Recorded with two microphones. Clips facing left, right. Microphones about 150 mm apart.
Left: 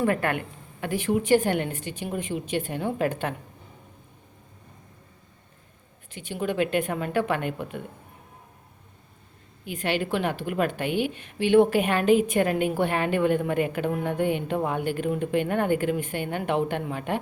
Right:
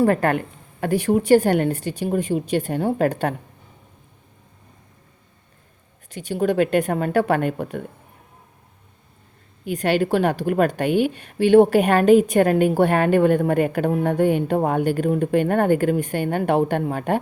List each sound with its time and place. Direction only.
0.0 s a woman's voice: 40° right (ahead or behind)
6.1 s a woman's voice: 40° right (ahead or behind)
9.6 s a woman's voice: 40° right (ahead or behind)